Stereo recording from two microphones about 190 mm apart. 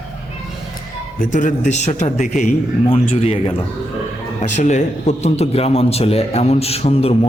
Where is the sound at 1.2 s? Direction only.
45° left (ahead or behind).